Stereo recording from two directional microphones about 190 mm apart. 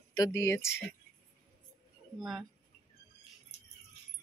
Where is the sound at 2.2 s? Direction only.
Centre (ahead or behind).